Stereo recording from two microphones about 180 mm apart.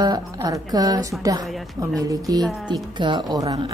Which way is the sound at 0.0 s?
20° right (ahead or behind).